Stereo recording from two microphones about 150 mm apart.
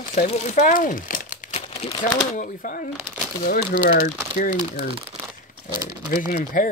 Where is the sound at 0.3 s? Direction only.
55° left (ahead or behind).